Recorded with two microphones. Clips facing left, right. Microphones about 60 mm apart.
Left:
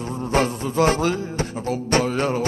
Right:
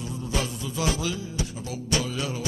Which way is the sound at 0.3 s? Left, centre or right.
Left.